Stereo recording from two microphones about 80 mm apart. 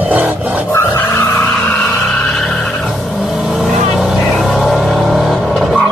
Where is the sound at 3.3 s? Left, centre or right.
Centre.